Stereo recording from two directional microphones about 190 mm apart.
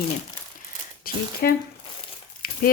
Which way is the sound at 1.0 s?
55° left (ahead or behind).